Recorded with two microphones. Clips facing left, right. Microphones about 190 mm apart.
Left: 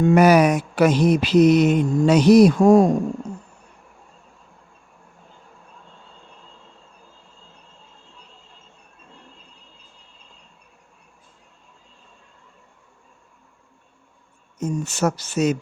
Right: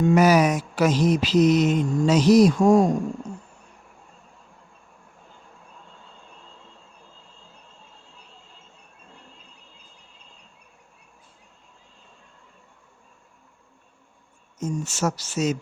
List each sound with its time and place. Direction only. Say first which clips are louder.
0.0 s mantra: left 3 dB; 60° left (ahead or behind)
14.6 s mantra: left 3 dB; 60° left (ahead or behind)